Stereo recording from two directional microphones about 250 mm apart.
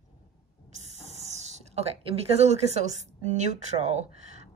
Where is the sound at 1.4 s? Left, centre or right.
Right.